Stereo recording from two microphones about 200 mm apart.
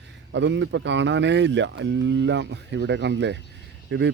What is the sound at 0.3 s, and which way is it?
Speech, 65° right (ahead or behind).